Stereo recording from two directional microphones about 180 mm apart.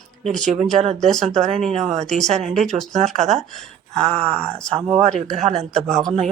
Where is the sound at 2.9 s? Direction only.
40° right (ahead or behind).